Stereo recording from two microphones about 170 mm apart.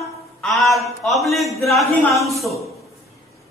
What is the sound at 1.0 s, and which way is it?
A man's voice, centre (ahead or behind).